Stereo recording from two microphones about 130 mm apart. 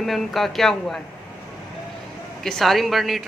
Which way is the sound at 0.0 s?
Centre (ahead or behind).